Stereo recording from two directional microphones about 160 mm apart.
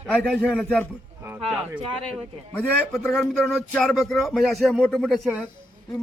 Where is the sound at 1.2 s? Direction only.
10° right (ahead or behind).